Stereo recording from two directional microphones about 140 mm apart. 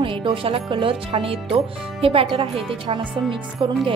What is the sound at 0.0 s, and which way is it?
Speech, 40° right (ahead or behind).